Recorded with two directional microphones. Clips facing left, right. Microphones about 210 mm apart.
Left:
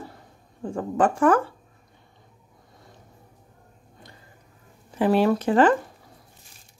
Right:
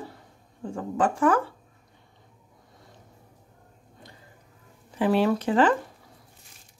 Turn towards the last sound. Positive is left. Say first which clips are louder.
# left 3 dB
turn(degrees=50)  # may be behind; listen again after turning